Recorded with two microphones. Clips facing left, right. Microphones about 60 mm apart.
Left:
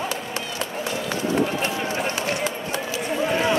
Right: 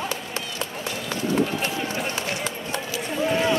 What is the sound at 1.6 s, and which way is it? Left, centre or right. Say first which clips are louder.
Run: left 2 dB; left.